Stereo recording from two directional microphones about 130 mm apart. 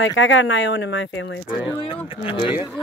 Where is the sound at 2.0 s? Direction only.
45° left (ahead or behind).